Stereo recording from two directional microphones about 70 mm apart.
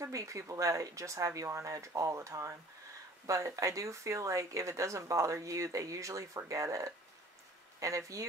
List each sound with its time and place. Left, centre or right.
0.0 s speech: right